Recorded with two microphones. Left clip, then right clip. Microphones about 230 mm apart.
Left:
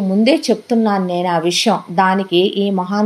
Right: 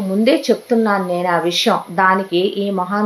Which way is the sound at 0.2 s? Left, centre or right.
Left.